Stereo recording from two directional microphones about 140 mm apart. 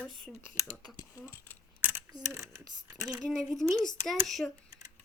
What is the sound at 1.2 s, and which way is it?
Speech, 15° left (ahead or behind).